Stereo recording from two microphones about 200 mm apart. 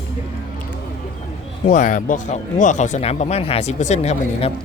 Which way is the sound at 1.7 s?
40° left (ahead or behind).